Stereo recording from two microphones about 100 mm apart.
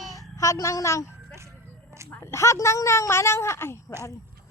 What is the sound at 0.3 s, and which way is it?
Speech, 30° left (ahead or behind).